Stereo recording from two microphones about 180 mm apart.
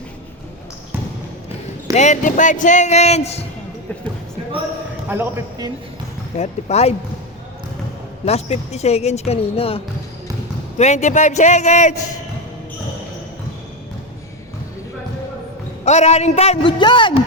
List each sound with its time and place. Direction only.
2.0 s speech: 45° left (ahead or behind)
5.0 s speech: 10° right (ahead or behind)
6.4 s speech: 35° left (ahead or behind)
8.2 s speech: 35° left (ahead or behind)
15.8 s speech: 40° left (ahead or behind)